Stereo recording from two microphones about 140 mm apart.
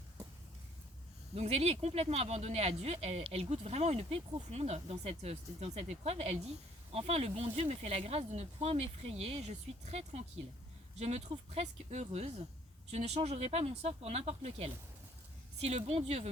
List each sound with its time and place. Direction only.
1.4 s speech: 50° right (ahead or behind)